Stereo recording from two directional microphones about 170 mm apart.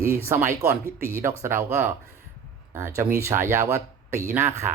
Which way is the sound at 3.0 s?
15° right (ahead or behind).